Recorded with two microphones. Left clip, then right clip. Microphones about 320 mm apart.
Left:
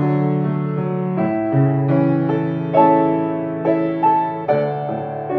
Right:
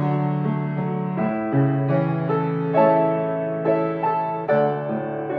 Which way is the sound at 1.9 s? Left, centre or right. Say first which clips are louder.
Left 5 dB; left.